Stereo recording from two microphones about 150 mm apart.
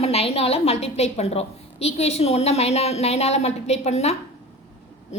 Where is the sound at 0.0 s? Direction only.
40° left (ahead or behind).